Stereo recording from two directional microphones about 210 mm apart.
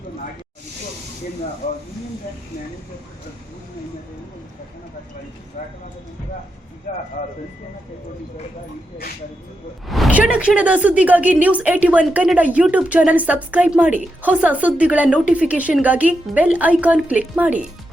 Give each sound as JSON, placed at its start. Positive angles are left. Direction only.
{"t": 5.6, "sound": "speech", "side_deg": 35}
{"t": 9.9, "sound": "a woman's voice", "side_deg": -5}